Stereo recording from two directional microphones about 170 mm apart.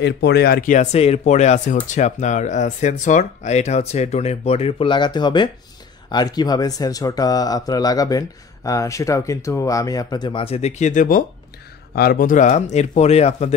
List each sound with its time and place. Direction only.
0.0 s speech: 75° left (ahead or behind); by 11.2 s 50° left (ahead or behind)
11.9 s speech: 60° left (ahead or behind); by 13.6 s 40° left (ahead or behind)